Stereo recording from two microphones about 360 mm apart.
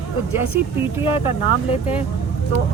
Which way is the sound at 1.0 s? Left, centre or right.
Centre.